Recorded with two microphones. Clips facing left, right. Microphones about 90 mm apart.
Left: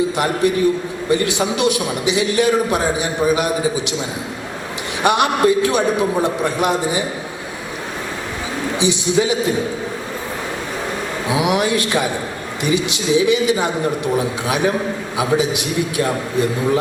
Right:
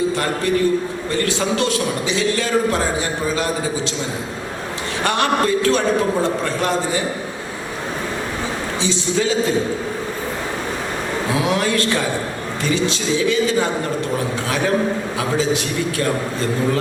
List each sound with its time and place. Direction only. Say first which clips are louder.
0.2 s a man's voice: left 2 dB; 15° left (ahead or behind)
5.0 s a man's voice: left 4 dB; 15° left (ahead or behind)
8.8 s a man's voice: left 3 dB; 15° left (ahead or behind)
11.3 s a man's voice: left 3 dB; 15° left (ahead or behind)